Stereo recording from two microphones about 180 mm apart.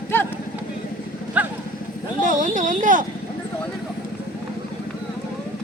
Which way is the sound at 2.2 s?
45° right (ahead or behind).